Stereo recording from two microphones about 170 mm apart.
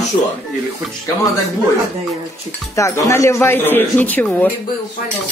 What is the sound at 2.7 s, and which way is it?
Speech, 20° left (ahead or behind).